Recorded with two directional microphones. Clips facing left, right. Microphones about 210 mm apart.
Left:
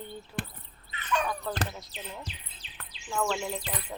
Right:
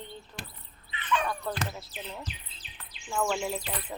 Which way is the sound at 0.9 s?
45° left (ahead or behind).